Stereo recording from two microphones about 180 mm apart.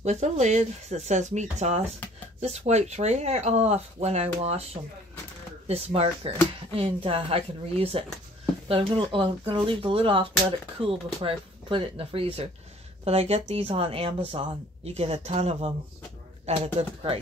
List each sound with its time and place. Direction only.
0.0 s speech: 40° right (ahead or behind)
5.7 s speech: 30° right (ahead or behind)